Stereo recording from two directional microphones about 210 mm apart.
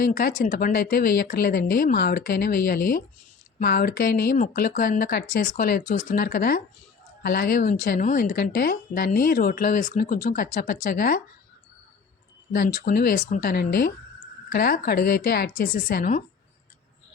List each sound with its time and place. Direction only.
0.0 s a woman's voice: 45° left (ahead or behind)
12.5 s speech: 40° left (ahead or behind)
13.5 s a woman's voice: 50° left (ahead or behind)